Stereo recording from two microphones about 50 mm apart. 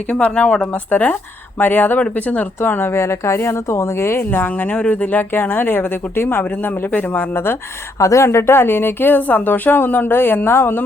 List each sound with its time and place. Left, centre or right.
0.3 s speech: centre
0.7 s speech: left
2.6 s speech: left
4.2 s speech: left
7.9 s speech: left